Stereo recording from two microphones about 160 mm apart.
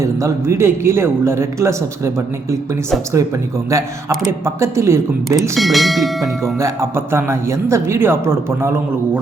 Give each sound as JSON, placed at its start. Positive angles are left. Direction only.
{"t": 0.0, "sound": "speech", "side_deg": -20}
{"t": 4.3, "sound": "speech", "side_deg": -15}
{"t": 5.4, "sound": "speech", "side_deg": 0}
{"t": 6.6, "sound": "speech", "side_deg": -15}